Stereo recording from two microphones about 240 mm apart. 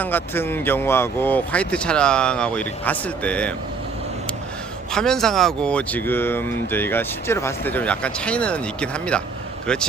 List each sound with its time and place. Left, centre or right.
0.0 s speech: centre
4.9 s speech: centre